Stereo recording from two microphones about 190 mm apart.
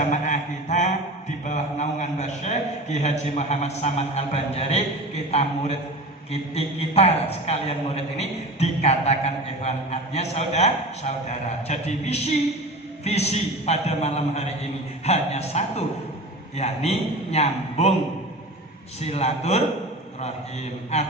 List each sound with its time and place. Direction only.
0.0 s a sound: 40° left (ahead or behind)
1.5 s a man's voice: 40° left (ahead or behind)
19.0 s a man's voice: 35° left (ahead or behind)
20.9 s a man's voice: 35° left (ahead or behind)